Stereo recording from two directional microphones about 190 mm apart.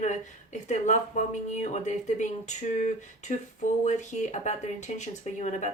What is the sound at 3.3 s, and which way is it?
Speech, 40° left (ahead or behind).